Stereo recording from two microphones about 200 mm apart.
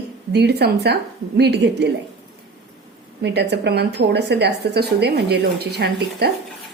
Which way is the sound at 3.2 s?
55° right (ahead or behind).